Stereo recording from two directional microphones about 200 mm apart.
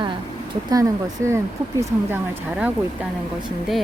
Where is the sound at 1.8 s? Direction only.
10° right (ahead or behind).